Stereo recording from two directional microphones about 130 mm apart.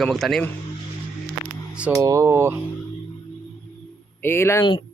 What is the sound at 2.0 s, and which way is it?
Speech, 25° right (ahead or behind).